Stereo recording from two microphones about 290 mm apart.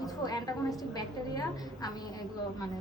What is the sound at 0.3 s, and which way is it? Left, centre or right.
A woman's voice, centre.